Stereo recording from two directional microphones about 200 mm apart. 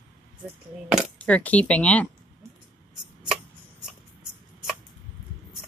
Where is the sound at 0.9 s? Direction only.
Centre (ahead or behind).